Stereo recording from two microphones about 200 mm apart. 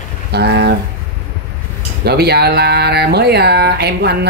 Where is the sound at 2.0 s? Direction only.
55° right (ahead or behind).